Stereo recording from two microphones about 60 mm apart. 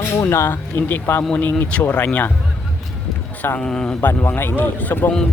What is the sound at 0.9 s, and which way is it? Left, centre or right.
Speech, left.